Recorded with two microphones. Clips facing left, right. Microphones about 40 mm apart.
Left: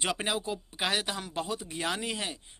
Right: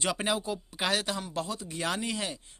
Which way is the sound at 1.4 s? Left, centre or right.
Left.